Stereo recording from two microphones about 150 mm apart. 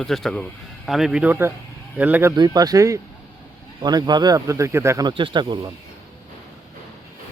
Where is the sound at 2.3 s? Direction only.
30° right (ahead or behind).